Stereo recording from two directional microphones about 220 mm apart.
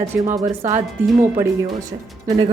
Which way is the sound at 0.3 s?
35° right (ahead or behind).